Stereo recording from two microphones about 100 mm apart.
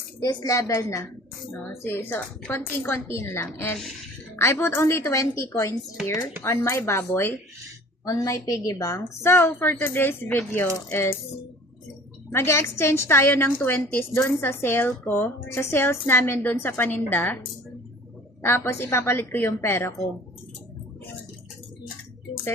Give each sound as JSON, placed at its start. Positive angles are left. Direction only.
{"t": 0.3, "sound": "a woman's voice", "side_deg": 40}
{"t": 8.0, "sound": "a woman's voice", "side_deg": 35}
{"t": 12.3, "sound": "a woman's voice", "side_deg": 25}
{"t": 18.4, "sound": "a woman's voice", "side_deg": 25}